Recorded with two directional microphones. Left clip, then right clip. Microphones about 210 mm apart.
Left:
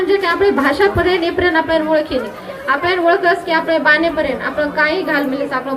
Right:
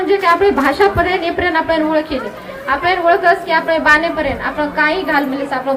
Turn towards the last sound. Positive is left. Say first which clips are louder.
# right 1 dB
turn(degrees=-10)  # may be behind; listen again after turning